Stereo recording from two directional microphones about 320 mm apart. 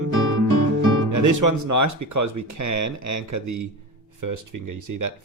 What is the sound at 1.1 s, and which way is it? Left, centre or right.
Speech, right.